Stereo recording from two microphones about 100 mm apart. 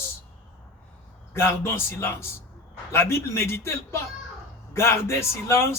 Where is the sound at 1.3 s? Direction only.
25° left (ahead or behind).